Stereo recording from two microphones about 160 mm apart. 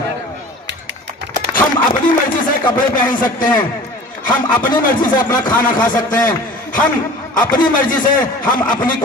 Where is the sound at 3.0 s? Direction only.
60° left (ahead or behind).